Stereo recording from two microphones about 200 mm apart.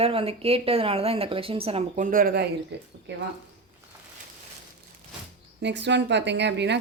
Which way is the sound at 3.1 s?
60° right (ahead or behind).